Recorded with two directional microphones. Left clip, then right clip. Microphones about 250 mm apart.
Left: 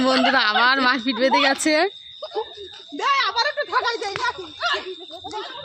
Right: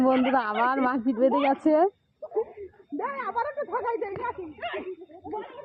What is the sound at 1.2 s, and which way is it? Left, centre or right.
Speech, left.